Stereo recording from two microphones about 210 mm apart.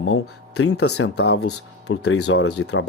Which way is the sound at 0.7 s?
90° left.